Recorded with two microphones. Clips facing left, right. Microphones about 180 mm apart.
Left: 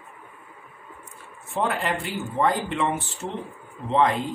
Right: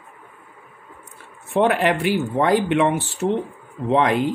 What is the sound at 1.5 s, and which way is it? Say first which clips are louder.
Speech: right 8 dB; 70° right (ahead or behind).